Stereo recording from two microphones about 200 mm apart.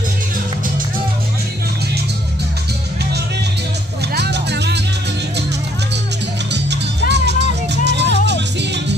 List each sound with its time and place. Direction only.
4.1 s music: 55° right (ahead or behind)
6.5 s music: 60° right (ahead or behind)